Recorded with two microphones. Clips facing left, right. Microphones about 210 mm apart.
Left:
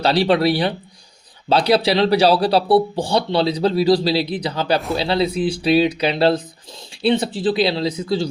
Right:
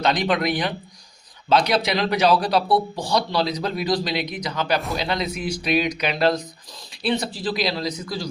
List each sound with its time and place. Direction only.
0.0 s speech: 35° left (ahead or behind)